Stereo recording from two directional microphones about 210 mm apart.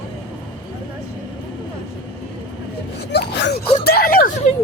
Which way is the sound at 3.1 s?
55° left (ahead or behind).